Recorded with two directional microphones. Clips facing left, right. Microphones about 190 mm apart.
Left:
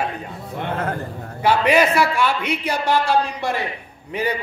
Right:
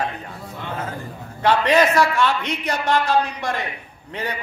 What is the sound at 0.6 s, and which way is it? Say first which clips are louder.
Speech: left 6 dB; 60° left (ahead or behind).